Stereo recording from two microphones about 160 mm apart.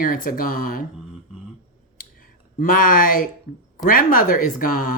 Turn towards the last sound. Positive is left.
turn(degrees=60)  # may be behind; listen again after turning